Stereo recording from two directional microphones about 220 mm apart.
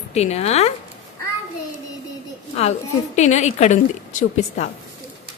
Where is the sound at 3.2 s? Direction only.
30° left (ahead or behind).